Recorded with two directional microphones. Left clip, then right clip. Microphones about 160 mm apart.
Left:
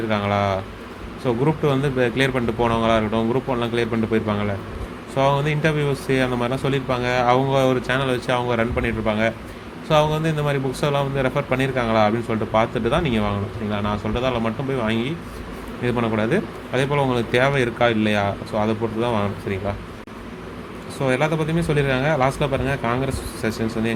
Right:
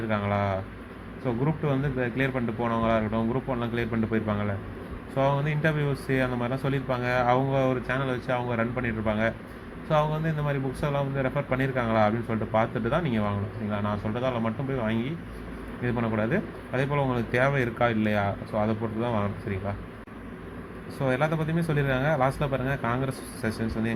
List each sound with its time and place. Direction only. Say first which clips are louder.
0.1 s a man's voice: left 6 dB; 10° left (ahead or behind)
21.0 s a man's voice: left 6 dB; 5° left (ahead or behind)